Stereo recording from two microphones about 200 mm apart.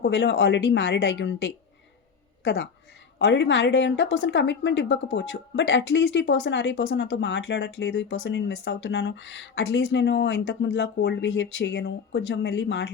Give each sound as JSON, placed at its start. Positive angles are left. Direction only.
{"t": 0.0, "sound": "a woman's voice", "side_deg": 60}